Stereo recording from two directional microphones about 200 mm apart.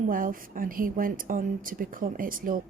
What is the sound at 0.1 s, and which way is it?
A woman's voice, 45° right (ahead or behind).